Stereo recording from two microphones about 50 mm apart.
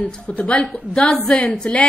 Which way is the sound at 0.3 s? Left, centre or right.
Left.